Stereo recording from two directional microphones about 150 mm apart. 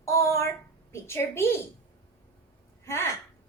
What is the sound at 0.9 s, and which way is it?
Speech, 15° left (ahead or behind).